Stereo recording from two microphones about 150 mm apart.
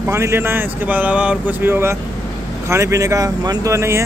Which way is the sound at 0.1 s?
15° right (ahead or behind).